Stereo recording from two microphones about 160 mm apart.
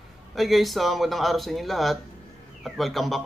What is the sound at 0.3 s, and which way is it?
Speech, centre (ahead or behind).